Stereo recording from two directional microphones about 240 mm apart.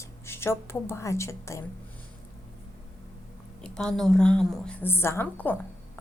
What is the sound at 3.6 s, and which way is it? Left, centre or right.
A woman's voice, centre.